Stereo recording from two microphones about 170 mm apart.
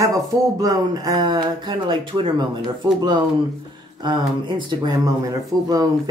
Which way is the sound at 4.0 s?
25° right (ahead or behind).